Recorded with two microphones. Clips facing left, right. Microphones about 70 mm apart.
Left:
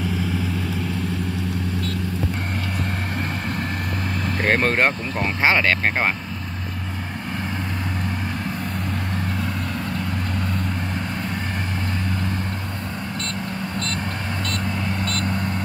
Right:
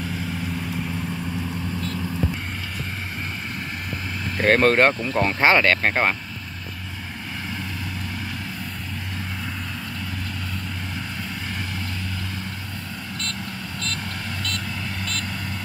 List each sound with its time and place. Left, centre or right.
4.5 s speech: centre
14.5 s vehicle: left